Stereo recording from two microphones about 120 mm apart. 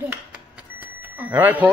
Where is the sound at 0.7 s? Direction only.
15° right (ahead or behind).